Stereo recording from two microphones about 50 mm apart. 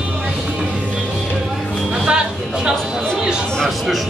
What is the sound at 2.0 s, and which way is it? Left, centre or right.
Music, centre.